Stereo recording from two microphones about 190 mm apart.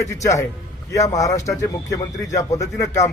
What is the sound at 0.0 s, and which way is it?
A man's voice, 15° left (ahead or behind).